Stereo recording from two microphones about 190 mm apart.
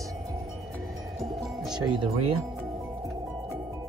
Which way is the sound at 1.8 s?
25° right (ahead or behind).